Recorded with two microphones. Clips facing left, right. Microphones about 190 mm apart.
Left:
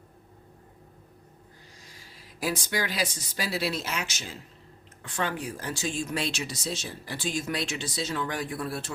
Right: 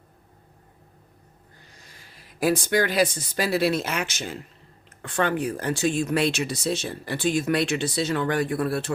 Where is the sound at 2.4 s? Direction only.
55° right (ahead or behind).